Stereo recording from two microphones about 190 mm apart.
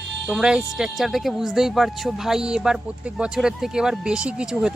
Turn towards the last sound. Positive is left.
turn(degrees=-5)  # may be behind; listen again after turning